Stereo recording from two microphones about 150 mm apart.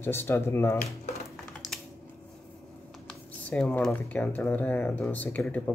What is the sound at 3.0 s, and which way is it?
Speech, 5° left (ahead or behind).